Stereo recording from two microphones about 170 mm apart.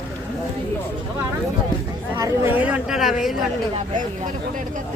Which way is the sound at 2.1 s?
15° right (ahead or behind).